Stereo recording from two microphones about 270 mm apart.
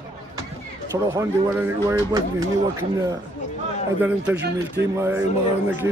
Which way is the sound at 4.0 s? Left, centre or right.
Centre.